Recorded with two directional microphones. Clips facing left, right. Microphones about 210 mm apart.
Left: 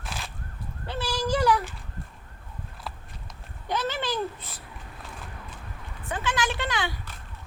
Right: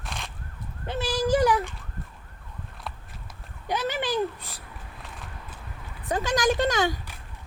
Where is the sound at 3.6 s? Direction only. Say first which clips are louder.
Right 1 dB; 15° right (ahead or behind).